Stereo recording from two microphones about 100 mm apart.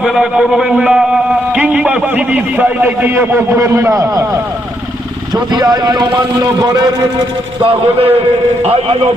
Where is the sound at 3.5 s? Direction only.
30° right (ahead or behind).